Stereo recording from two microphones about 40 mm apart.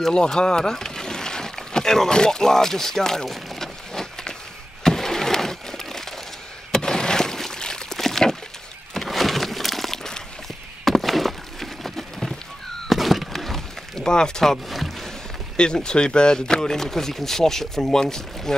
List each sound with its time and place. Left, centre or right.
0.1 s speech: left
3.3 s a sound: centre
10.9 s neigh: centre
12.9 s a sound: centre
13.9 s speech: centre
14.4 s rowboat: centre
15.5 s speech: left